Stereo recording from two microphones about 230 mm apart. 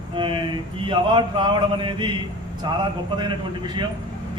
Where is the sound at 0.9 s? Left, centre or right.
Centre.